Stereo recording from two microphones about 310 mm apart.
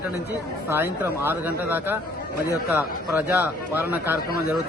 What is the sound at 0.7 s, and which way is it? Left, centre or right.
A man's voice, centre.